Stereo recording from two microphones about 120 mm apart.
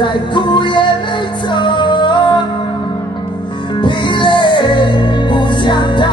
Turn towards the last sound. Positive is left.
turn(degrees=40)  # may be behind; listen again after turning